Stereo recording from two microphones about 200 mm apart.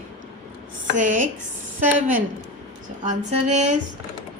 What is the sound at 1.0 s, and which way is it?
Speech, 40° right (ahead or behind).